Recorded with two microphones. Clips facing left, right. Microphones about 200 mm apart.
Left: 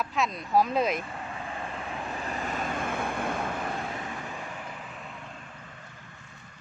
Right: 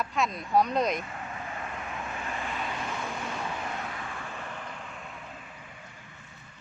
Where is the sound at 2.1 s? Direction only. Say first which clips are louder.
Left 3 dB; 35° left (ahead or behind); by 3.3 s 55° left (ahead or behind).